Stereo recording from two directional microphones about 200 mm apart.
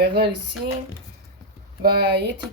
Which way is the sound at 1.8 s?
50° right (ahead or behind).